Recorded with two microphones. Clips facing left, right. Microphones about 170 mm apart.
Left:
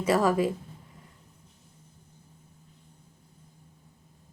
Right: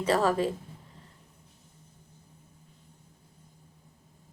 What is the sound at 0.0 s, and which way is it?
Speech, 10° left (ahead or behind).